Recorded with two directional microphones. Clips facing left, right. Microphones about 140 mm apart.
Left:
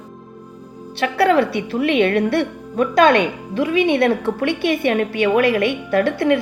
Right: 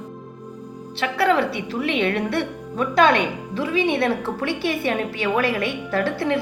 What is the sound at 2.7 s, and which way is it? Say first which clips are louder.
A woman's voice: left 4 dB; 55° left (ahead or behind).